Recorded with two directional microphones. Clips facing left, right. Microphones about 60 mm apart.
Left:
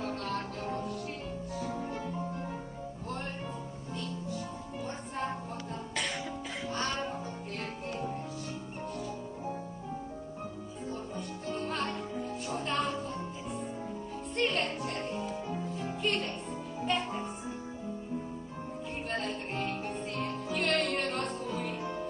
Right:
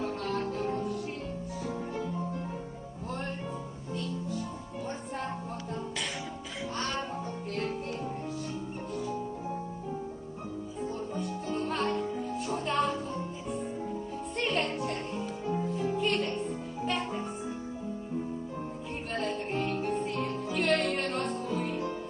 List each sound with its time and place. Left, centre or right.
0.2 s music: centre
11.1 s music: centre
14.3 s music: centre
19.0 s music: centre